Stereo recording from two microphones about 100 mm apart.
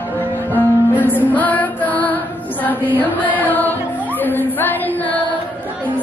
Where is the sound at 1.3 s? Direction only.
15° left (ahead or behind).